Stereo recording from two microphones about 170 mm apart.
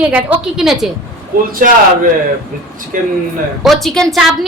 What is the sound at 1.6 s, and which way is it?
Speech, 55° right (ahead or behind).